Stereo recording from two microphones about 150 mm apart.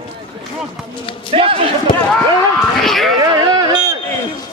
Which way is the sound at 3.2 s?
25° right (ahead or behind).